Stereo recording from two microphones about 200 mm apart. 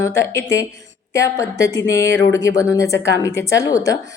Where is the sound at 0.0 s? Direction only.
15° left (ahead or behind).